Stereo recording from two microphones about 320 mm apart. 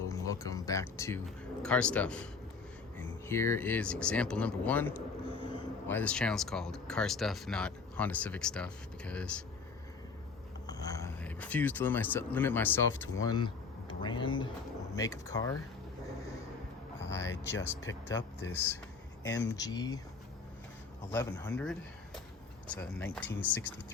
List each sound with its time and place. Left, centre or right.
0.1 s speech: centre
10.7 s speech: centre
17.0 s speech: centre
19.2 s speech: left
19.5 s speech: centre
21.1 s speech: centre